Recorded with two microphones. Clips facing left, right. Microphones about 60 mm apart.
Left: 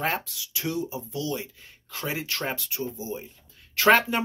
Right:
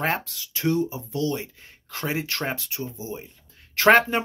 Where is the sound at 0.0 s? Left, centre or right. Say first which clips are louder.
Right 2 dB; right.